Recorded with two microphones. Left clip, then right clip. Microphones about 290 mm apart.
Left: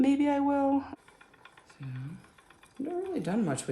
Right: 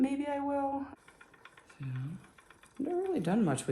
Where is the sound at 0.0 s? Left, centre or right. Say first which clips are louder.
Left 6 dB; left.